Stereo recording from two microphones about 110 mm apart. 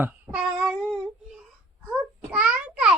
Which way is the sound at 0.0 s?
15° right (ahead or behind).